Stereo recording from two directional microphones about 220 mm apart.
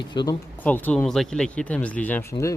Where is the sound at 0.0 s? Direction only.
20° left (ahead or behind).